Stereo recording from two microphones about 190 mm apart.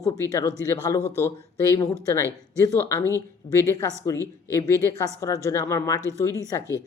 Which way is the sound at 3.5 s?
15° left (ahead or behind).